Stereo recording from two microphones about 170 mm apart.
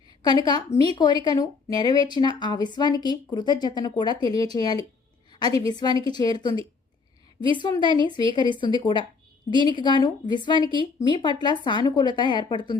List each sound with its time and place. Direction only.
0.2 s a woman's voice: 25° left (ahead or behind)